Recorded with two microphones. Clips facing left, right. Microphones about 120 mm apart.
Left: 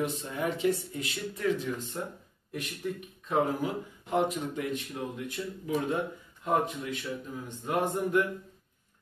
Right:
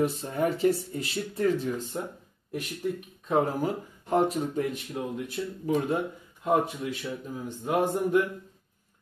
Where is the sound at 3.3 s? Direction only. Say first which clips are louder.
Right 3 dB; 40° right (ahead or behind).